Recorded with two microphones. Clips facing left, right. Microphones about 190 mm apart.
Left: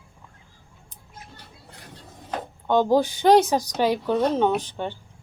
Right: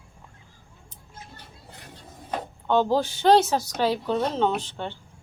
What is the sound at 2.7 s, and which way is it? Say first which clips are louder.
A woman's voice: left 3 dB; 15° left (ahead or behind).